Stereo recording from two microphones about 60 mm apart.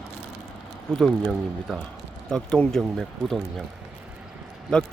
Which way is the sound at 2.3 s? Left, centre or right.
Centre.